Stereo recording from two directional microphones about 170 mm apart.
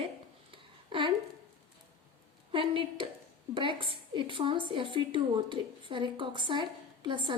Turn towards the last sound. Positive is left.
turn(degrees=-30)  # may be behind; listen again after turning